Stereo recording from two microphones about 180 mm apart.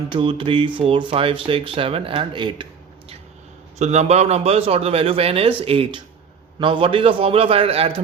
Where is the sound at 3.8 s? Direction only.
40° right (ahead or behind).